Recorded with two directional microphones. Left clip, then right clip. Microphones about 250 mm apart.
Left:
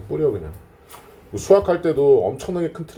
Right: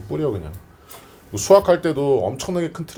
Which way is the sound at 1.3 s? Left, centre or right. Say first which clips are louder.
Right 2 dB; right.